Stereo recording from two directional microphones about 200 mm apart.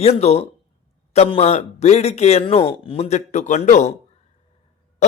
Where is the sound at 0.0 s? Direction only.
30° left (ahead or behind).